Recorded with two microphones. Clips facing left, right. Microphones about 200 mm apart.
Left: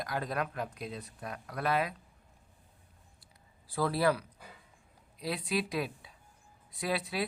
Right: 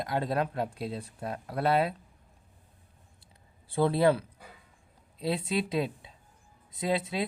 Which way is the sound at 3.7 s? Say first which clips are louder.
Right 5 dB; 25° right (ahead or behind).